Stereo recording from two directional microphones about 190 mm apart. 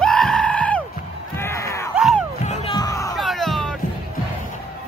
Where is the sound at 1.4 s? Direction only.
15° left (ahead or behind).